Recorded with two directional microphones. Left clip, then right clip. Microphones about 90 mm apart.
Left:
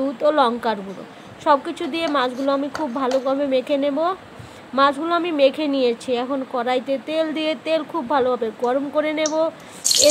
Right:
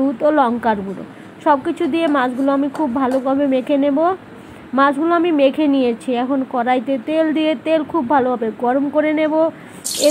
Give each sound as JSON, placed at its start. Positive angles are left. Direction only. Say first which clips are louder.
{"t": 0.3, "sound": "a woman's voice", "louder": "right 2 dB", "side_deg": -35}